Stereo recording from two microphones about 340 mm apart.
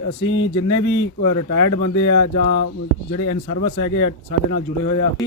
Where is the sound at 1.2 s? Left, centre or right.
Left.